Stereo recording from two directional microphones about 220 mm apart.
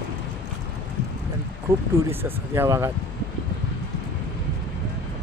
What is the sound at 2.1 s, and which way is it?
Speech, 10° right (ahead or behind).